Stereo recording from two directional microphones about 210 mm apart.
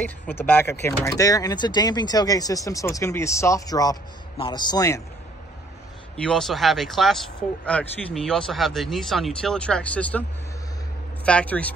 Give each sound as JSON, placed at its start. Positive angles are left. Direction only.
{"t": 0.0, "sound": "speech", "side_deg": 10}
{"t": 6.1, "sound": "speech", "side_deg": 5}
{"t": 11.2, "sound": "speech", "side_deg": 5}